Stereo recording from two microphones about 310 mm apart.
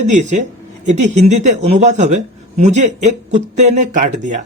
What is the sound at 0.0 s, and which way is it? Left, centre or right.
Speech, right.